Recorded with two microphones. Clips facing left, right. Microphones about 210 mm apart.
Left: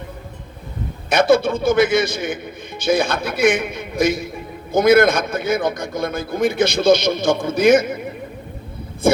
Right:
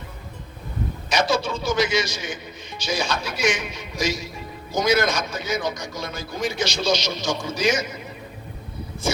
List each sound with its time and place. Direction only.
1.1 s a man's voice: 55° left (ahead or behind)
9.0 s a man's voice: 55° left (ahead or behind)